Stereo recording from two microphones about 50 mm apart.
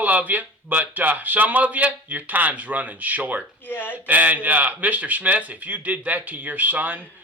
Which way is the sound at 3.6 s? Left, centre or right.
Left.